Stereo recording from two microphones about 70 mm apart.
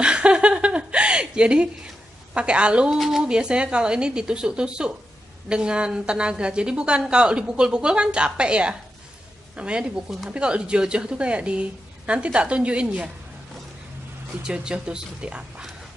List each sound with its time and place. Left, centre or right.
0.0 s chuckle: centre
2.3 s a woman's voice: centre
14.4 s a woman's voice: centre